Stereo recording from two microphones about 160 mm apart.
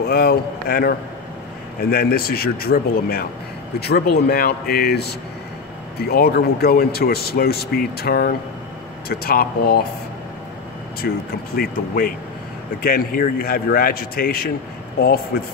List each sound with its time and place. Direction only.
0.0 s speech: 70° left (ahead or behind)
11.0 s speech: 80° left
11.5 s speech: 65° left (ahead or behind)